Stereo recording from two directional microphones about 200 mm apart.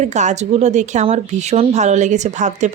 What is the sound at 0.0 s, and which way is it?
Speech, 35° right (ahead or behind).